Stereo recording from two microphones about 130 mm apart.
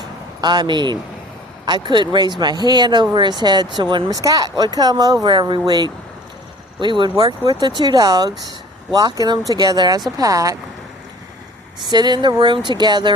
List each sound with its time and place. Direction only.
0.4 s speech: 35° right (ahead or behind)
11.9 s speech: 35° right (ahead or behind)